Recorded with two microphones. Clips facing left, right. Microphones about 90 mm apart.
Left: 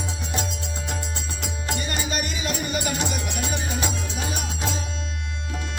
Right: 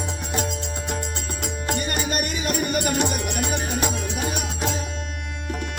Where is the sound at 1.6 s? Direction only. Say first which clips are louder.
Right 3 dB; 55° right (ahead or behind).